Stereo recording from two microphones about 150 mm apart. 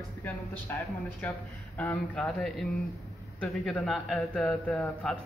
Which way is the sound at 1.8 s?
10° left (ahead or behind).